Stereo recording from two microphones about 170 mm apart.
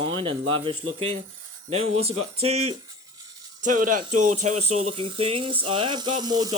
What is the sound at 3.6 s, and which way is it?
Speech, 50° right (ahead or behind).